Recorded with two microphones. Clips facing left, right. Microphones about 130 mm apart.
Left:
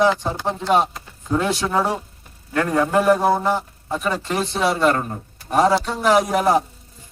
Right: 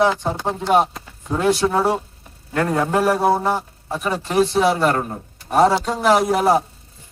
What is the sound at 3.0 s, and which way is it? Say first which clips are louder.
A man's voice: even; 10° right (ahead or behind).